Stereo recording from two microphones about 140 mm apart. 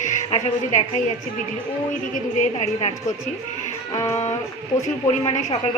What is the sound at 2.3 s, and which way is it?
Speech, 55° left (ahead or behind).